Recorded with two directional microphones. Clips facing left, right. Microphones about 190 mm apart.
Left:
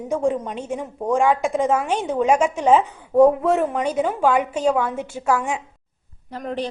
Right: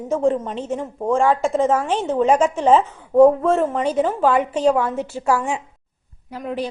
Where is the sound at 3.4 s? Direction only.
15° left (ahead or behind).